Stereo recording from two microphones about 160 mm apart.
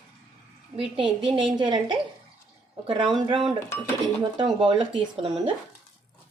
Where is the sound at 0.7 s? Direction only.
35° right (ahead or behind).